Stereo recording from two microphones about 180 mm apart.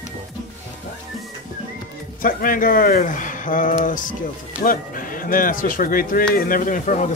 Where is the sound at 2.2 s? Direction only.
50° left (ahead or behind).